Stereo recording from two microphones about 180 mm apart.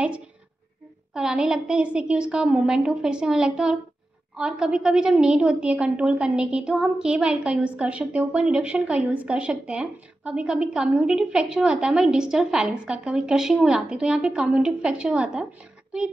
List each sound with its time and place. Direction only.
1.1 s a woman's voice: 5° right (ahead or behind)